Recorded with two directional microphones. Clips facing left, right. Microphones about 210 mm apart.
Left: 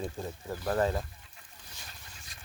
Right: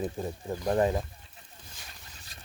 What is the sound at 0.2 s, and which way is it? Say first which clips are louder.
Speech: right 4 dB; 15° right (ahead or behind).